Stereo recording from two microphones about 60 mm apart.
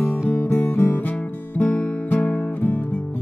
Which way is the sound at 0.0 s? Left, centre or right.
Left.